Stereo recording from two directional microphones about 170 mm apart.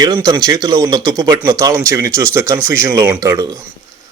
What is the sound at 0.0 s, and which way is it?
Speech, 20° right (ahead or behind).